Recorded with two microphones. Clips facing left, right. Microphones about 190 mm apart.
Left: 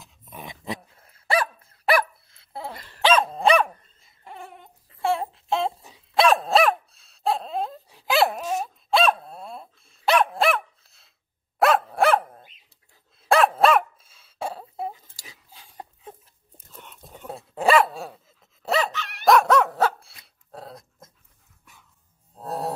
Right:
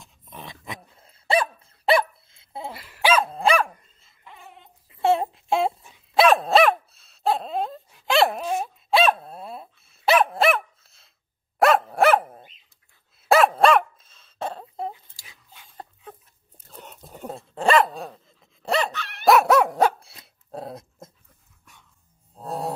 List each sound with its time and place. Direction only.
0.0 s dog: centre (ahead or behind)
0.9 s dog: 25° right (ahead or behind)
2.7 s dog: 10° right (ahead or behind)
4.2 s a sound: 50° left (ahead or behind)
5.0 s a sound: 20° right (ahead or behind)
6.1 s dog: centre (ahead or behind)
15.1 s dog: 40° left (ahead or behind)
17.3 s dog: 5° left (ahead or behind); by 21.1 s 25° right (ahead or behind)
21.7 s dog: centre (ahead or behind)
22.3 s mantra: centre (ahead or behind)